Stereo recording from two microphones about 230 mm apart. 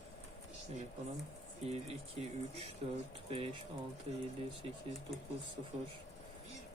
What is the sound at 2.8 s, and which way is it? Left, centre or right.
Speech, right.